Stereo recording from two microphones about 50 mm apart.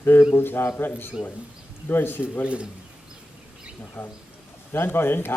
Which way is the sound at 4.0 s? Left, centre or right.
Left.